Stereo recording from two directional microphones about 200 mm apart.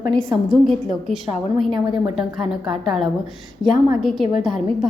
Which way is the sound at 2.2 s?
Centre (ahead or behind).